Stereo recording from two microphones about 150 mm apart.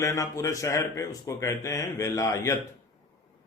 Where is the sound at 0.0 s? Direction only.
20° left (ahead or behind).